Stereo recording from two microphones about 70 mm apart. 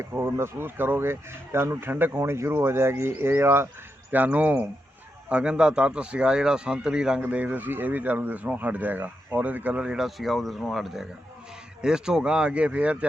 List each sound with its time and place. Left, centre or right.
0.1 s speech: right
4.1 s a man's voice: right
7.2 s a man's voice: right